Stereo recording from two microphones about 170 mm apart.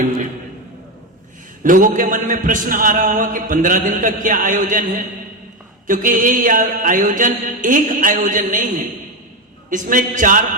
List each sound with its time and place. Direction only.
1.6 s a man's voice: 50° right (ahead or behind)
5.9 s a man's voice: 50° right (ahead or behind)